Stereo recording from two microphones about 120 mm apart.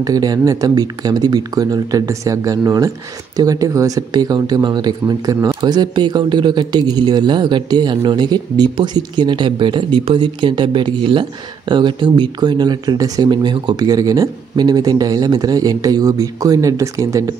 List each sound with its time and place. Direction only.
0.0 s speech: 30° right (ahead or behind)